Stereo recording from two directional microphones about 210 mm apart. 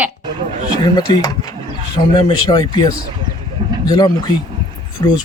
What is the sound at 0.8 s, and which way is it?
Speech, 20° left (ahead or behind).